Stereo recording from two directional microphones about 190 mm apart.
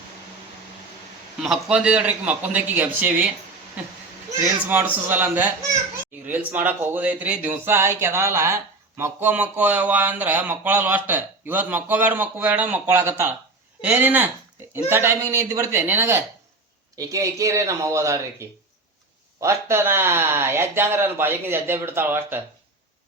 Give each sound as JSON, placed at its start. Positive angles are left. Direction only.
{"t": 1.4, "sound": "speech", "side_deg": 0}
{"t": 5.0, "sound": "speech", "side_deg": -10}